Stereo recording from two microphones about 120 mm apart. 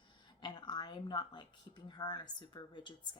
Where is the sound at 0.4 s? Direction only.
35° left (ahead or behind).